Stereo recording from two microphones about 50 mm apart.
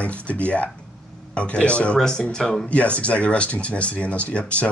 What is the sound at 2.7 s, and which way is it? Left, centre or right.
Speech, left.